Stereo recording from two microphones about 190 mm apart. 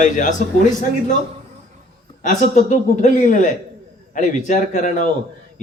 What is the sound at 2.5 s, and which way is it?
A man's voice, 40° left (ahead or behind).